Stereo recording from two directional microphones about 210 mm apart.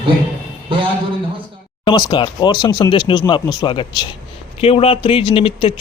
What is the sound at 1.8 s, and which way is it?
Speech, 20° left (ahead or behind).